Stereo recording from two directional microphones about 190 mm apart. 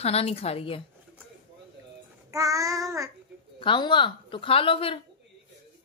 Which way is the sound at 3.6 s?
25° left (ahead or behind).